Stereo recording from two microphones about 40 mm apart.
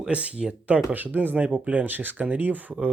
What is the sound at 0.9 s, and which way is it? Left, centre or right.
Speech, right.